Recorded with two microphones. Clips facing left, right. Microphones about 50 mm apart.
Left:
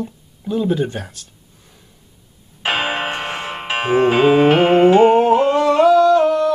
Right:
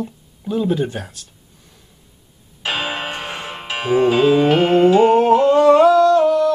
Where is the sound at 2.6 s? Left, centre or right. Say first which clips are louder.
Left 3 dB; left.